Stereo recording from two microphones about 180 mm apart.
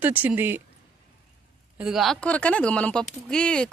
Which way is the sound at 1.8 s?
Centre (ahead or behind).